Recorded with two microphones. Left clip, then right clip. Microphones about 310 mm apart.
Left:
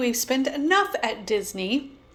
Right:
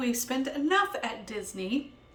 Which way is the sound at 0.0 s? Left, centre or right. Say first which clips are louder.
Left 7 dB; centre.